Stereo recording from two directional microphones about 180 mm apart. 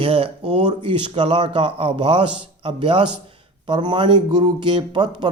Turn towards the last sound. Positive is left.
turn(degrees=-25)  # may be behind; listen again after turning